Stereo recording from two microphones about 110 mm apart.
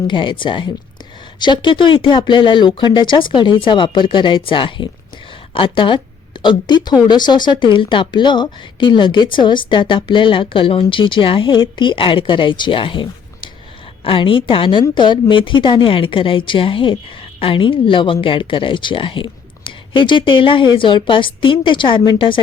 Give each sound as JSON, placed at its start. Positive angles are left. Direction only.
{"t": 0.1, "sound": "a woman's voice", "side_deg": 50}